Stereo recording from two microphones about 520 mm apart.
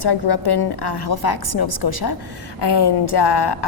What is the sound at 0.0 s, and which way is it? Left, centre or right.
A woman's voice, left.